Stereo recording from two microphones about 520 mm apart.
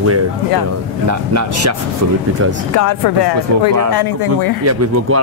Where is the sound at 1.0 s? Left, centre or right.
Right.